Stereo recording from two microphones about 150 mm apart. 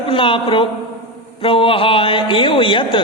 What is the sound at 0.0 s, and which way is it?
A man's voice, 35° left (ahead or behind).